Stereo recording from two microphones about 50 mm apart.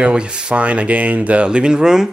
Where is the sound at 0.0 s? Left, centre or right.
Centre.